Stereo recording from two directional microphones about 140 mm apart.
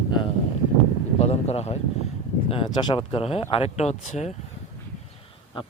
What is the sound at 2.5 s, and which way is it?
Speech, 35° left (ahead or behind).